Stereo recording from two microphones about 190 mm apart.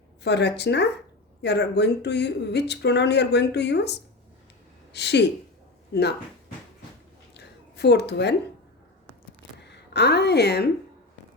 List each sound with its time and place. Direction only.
0.2 s a woman's voice: 65° left (ahead or behind)
7.3 s a sound: 60° left (ahead or behind)
9.6 s a woman's voice: 65° left (ahead or behind)